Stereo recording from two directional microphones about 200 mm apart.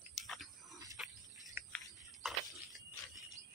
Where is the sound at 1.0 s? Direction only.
Centre (ahead or behind).